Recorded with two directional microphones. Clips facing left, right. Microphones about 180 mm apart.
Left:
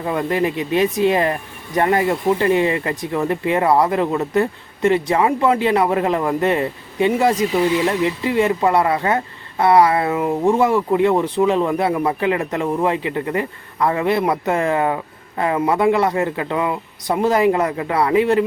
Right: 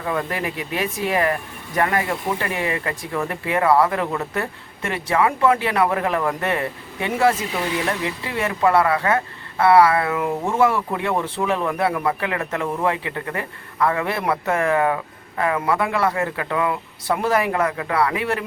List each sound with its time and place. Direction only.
0.0 s speech: 25° left (ahead or behind)
8.4 s speech: 20° left (ahead or behind)